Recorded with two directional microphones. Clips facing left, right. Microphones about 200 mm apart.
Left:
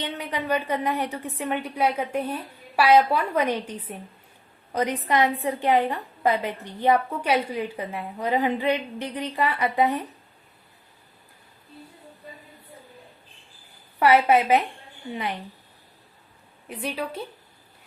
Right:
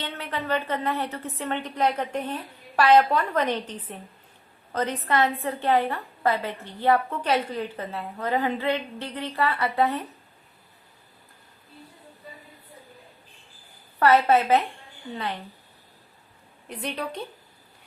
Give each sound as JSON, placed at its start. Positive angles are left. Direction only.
{"t": 0.0, "sound": "a woman's voice", "side_deg": 15}
{"t": 14.0, "sound": "a woman's voice", "side_deg": 15}
{"t": 16.6, "sound": "a woman's voice", "side_deg": 5}